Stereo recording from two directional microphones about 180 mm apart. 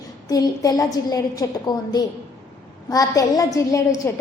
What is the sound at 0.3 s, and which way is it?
A woman's voice, 20° left (ahead or behind).